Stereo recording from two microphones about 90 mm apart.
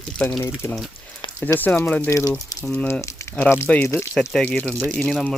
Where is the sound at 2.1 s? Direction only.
35° left (ahead or behind).